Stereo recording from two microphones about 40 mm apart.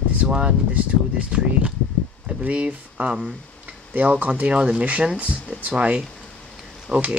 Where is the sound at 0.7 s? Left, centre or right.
Right.